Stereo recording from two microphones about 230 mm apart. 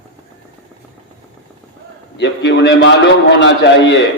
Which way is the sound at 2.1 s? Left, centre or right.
Left.